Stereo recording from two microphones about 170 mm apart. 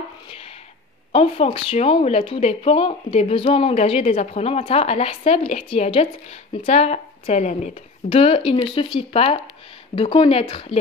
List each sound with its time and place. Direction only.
1.1 s speech: 35° left (ahead or behind)